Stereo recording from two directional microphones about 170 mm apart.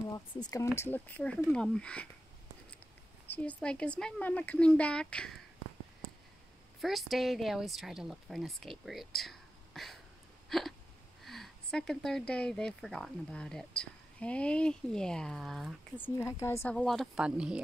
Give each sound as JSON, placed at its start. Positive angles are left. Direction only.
{"t": 0.1, "sound": "speech", "side_deg": 20}
{"t": 3.3, "sound": "speech", "side_deg": 10}
{"t": 6.8, "sound": "speech", "side_deg": 0}
{"t": 16.2, "sound": "speech", "side_deg": 15}
{"t": 16.7, "sound": "speech", "side_deg": 0}